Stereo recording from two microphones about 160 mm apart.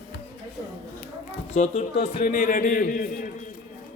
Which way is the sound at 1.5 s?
45° left (ahead or behind).